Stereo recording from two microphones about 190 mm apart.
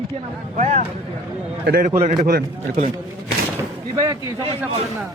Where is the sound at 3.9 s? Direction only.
20° right (ahead or behind).